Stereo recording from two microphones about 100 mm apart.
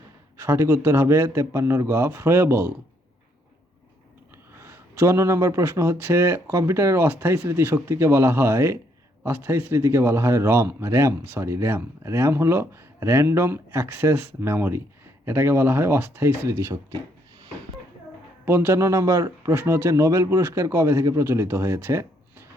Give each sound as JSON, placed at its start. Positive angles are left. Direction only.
{"t": 0.3, "sound": "speech", "side_deg": -25}
{"t": 4.5, "sound": "speech", "side_deg": -25}
{"t": 18.4, "sound": "speech", "side_deg": -25}